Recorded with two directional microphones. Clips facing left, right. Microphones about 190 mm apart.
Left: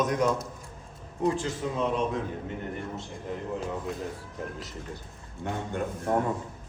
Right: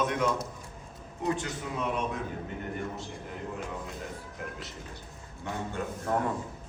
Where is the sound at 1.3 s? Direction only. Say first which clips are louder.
Left 3 dB; 30° left (ahead or behind).